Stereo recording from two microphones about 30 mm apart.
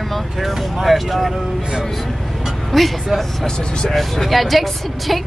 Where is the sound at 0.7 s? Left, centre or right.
Centre.